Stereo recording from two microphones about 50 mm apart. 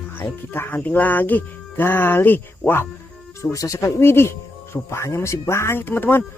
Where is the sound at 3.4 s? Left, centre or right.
Left.